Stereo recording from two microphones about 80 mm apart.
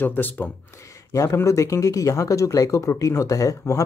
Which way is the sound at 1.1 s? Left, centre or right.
Left.